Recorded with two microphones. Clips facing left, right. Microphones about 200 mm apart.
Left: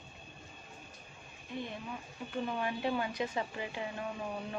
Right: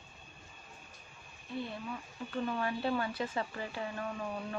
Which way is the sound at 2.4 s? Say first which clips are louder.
Right 1 dB; 20° left (ahead or behind).